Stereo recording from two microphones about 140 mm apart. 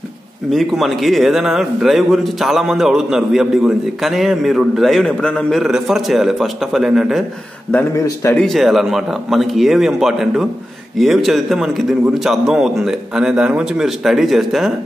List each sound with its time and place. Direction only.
0.5 s a man's voice: centre (ahead or behind)
7.7 s speech: 20° left (ahead or behind)
8.4 s a man's voice: centre (ahead or behind)